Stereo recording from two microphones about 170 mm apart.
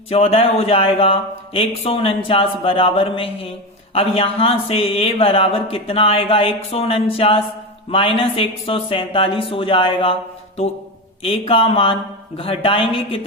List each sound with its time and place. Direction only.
0.1 s speech: 35° left (ahead or behind)
11.2 s speech: 35° left (ahead or behind)